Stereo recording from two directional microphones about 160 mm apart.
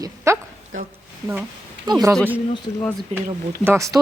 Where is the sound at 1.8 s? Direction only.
25° right (ahead or behind).